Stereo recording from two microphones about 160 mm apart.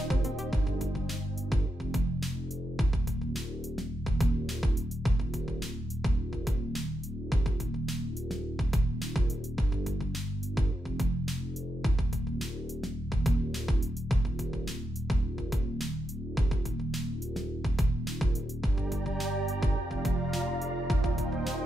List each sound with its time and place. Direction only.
0.1 s music: centre (ahead or behind)
3.7 s music: centre (ahead or behind)
7.8 s music: centre (ahead or behind)
12.4 s music: centre (ahead or behind)
17.7 s music: centre (ahead or behind)